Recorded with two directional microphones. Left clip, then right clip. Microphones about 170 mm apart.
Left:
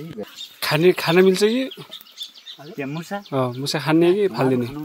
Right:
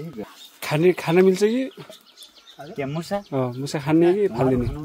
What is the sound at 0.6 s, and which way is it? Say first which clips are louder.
Speech: left 3 dB; 10° left (ahead or behind).